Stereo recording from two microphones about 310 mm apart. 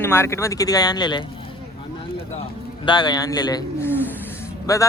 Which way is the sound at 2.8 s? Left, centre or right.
Centre.